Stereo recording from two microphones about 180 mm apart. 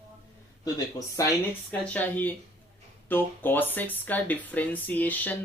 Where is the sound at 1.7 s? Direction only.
10° left (ahead or behind).